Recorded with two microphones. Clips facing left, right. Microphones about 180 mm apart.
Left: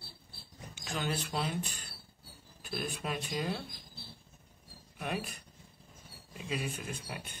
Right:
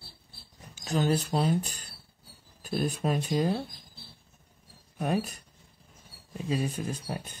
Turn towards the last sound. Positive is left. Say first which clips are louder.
# right 7 dB
turn(degrees=-35)  # may be behind; listen again after turning